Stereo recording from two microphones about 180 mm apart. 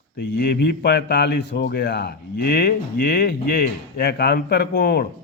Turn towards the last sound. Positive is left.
turn(degrees=65)  # may be behind; listen again after turning